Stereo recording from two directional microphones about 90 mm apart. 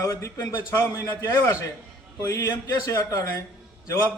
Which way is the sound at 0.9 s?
40° left (ahead or behind).